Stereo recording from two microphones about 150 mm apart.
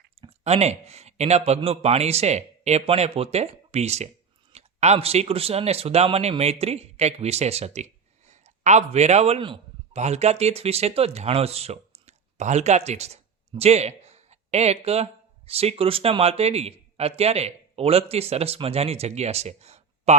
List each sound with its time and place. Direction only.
0.2 s a man's voice: 40° right (ahead or behind)